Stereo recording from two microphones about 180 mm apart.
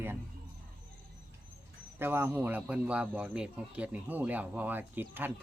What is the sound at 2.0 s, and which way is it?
Speech, 10° right (ahead or behind).